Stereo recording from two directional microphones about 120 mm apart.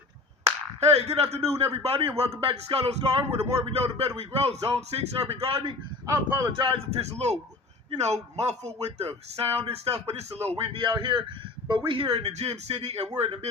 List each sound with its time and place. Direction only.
0.8 s speech: 65° right (ahead or behind)
6.1 s speech: 30° right (ahead or behind)
6.7 s speech: 55° right (ahead or behind)
11.9 s speech: 55° right (ahead or behind)